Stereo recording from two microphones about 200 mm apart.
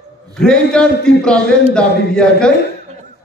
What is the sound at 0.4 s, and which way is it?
Music, 5° left (ahead or behind).